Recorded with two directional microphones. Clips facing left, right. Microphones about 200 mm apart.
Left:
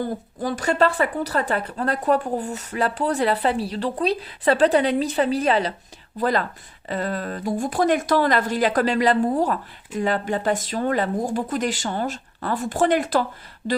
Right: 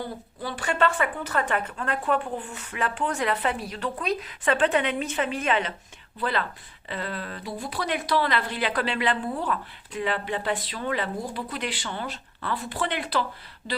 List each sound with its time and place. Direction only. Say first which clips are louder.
0.0 s a woman's voice: left 7 dB; 45° left (ahead or behind)